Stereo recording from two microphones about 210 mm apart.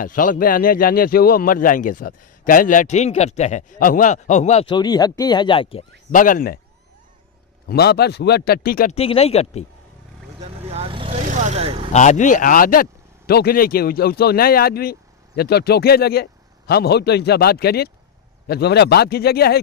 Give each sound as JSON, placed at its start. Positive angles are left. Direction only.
{"t": 0.0, "sound": "speech", "side_deg": 40}
{"t": 6.1, "sound": "speech", "side_deg": 40}
{"t": 7.6, "sound": "speech", "side_deg": 50}
{"t": 8.9, "sound": "speech", "side_deg": 30}
{"t": 10.4, "sound": "vehicle", "side_deg": -30}
{"t": 11.9, "sound": "speech", "side_deg": 35}